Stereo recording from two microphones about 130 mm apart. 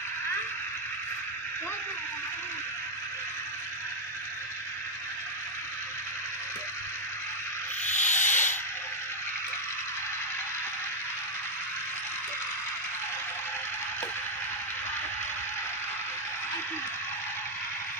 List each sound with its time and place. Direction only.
7.8 s owl: 65° left (ahead or behind)